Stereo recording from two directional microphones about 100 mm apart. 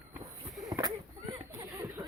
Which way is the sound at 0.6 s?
35° right (ahead or behind).